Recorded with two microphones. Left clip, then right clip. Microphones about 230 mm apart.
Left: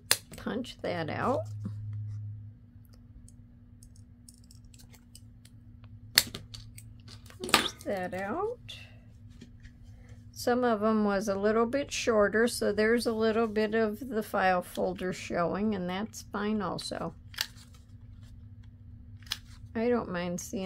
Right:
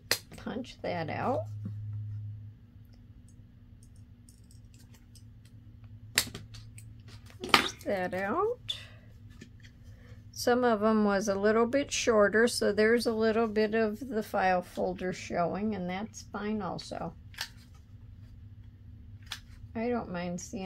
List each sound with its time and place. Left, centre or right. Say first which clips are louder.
0.1 s speech: left 2 dB; left
6.1 s typewriter: left 4 dB; left
7.3 s dishes: left 2 dB; centre
7.6 s speech: right 1 dB; centre; by 8.9 s right
10.3 s a woman's voice: right 1 dB; centre; by 17.5 s left
19.2 s speech: left 5 dB; left